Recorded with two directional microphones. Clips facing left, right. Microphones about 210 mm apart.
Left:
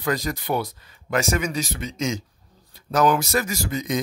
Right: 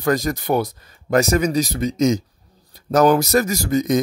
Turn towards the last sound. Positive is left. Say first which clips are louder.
# right 7 dB
turn(degrees=-45)  # may be behind; listen again after turning